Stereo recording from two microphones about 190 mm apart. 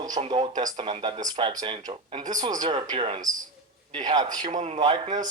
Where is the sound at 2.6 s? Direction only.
30° right (ahead or behind).